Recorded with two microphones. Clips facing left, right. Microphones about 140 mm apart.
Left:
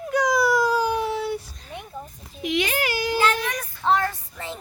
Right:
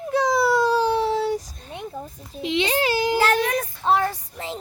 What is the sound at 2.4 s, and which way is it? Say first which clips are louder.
Speech: right 2 dB; 25° right (ahead or behind).